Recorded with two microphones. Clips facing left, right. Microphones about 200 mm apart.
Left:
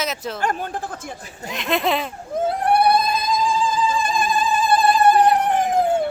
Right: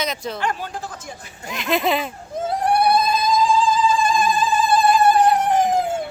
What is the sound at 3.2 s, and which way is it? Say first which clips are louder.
Music: right 3 dB; 55° left (ahead or behind).